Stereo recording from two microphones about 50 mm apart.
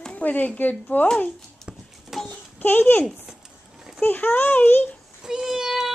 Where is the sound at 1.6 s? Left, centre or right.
Centre.